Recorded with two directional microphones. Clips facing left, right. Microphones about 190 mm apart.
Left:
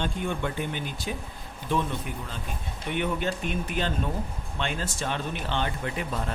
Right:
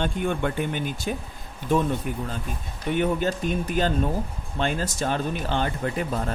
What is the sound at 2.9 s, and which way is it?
Speech, 40° right (ahead or behind).